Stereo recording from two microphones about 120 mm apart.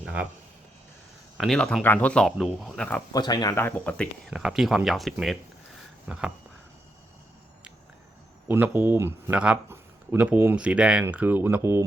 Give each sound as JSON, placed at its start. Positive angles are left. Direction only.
{"t": 0.0, "sound": "a sound", "side_deg": -10}
{"t": 1.4, "sound": "speech", "side_deg": 5}
{"t": 1.8, "sound": "speech", "side_deg": 15}
{"t": 3.1, "sound": "speech", "side_deg": 35}
{"t": 3.5, "sound": "speech", "side_deg": 20}
{"t": 4.3, "sound": "speech", "side_deg": -5}
{"t": 8.4, "sound": "speech", "side_deg": -15}